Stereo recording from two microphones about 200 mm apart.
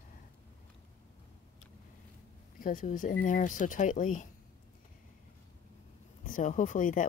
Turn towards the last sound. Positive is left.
turn(degrees=40)  # may be behind; listen again after turning